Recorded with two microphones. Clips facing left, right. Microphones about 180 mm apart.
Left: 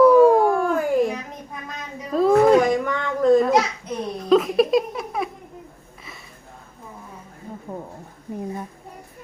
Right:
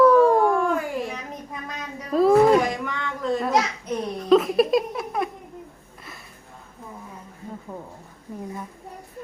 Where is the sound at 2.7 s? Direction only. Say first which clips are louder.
Left 7 dB; 45° left (ahead or behind).